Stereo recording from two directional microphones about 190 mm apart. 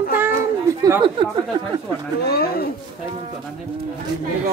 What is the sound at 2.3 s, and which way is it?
Speech, 55° left (ahead or behind).